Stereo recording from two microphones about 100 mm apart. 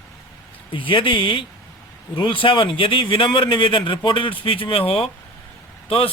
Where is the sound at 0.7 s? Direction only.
55° left (ahead or behind).